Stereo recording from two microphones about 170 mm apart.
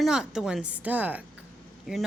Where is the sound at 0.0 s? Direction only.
5° right (ahead or behind).